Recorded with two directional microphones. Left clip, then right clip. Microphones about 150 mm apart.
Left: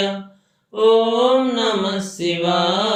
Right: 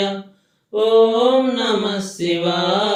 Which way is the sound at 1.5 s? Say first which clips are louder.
Even; 40° left (ahead or behind).